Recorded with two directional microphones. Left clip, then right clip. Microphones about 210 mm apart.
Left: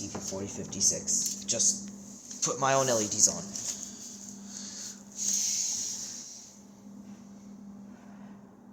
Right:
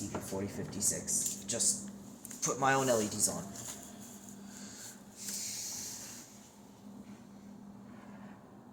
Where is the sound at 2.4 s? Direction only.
35° left (ahead or behind).